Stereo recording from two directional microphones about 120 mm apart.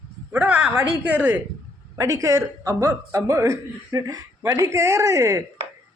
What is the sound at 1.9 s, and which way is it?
Speech, 30° right (ahead or behind).